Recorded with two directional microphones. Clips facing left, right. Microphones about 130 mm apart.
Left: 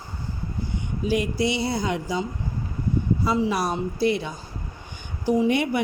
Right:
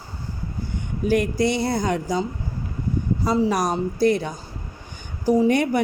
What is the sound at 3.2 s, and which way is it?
Speech, 40° right (ahead or behind).